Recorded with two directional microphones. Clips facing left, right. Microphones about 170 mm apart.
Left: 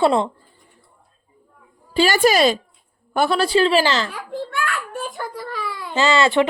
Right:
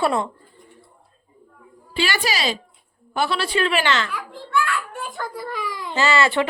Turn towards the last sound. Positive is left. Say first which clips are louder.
# left 3 dB
turn(degrees=20)  # may be behind; listen again after turning